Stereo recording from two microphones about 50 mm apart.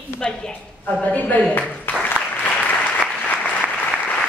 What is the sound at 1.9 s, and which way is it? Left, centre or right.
Applause, left.